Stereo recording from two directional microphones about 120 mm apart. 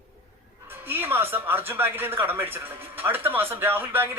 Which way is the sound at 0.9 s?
20° right (ahead or behind).